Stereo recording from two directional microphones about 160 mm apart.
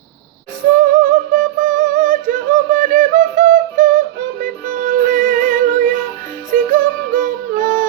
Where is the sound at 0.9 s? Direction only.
55° right (ahead or behind).